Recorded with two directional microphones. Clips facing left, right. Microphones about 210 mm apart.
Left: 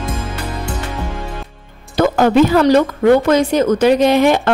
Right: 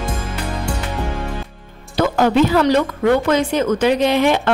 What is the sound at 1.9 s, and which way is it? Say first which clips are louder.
A woman's voice: left 3 dB; 50° left (ahead or behind).